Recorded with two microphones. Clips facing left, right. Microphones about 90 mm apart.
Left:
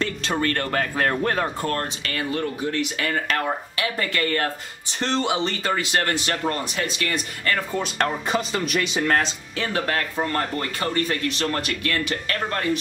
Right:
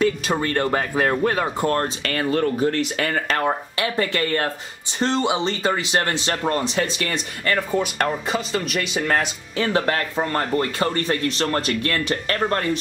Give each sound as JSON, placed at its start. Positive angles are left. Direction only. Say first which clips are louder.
{"t": 0.0, "sound": "speech", "louder": "right 3 dB", "side_deg": -15}
{"t": 1.6, "sound": "speech", "louder": "right 5 dB", "side_deg": -30}
{"t": 2.0, "sound": "speech", "louder": "right 6 dB", "side_deg": -40}
{"t": 4.9, "sound": "speech", "louder": "right 2 dB", "side_deg": -15}
{"t": 7.5, "sound": "speech", "louder": "right 4 dB", "side_deg": -10}
{"t": 8.1, "sound": "speech", "louder": "right 1 dB", "side_deg": 0}
{"t": 9.6, "sound": "speech", "louder": "right 4 dB", "side_deg": -25}